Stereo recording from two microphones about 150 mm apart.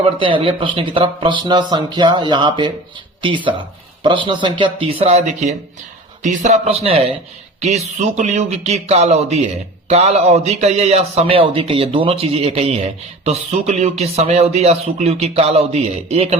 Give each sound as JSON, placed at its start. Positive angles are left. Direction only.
{"t": 0.2, "sound": "speech", "side_deg": -35}
{"t": 7.6, "sound": "speech", "side_deg": -50}